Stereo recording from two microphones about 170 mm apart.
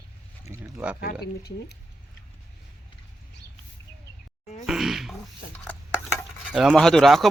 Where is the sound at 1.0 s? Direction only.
65° left (ahead or behind).